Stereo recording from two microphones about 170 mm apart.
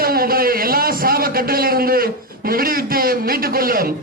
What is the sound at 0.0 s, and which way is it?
A man's voice, 60° right (ahead or behind).